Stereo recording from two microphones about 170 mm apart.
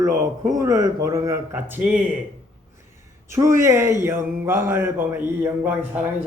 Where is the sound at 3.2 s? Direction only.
15° right (ahead or behind).